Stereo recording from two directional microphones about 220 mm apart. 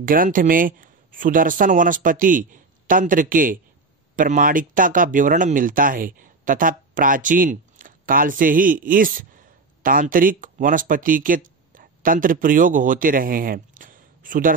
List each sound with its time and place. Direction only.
0.0 s speech: 40° right (ahead or behind)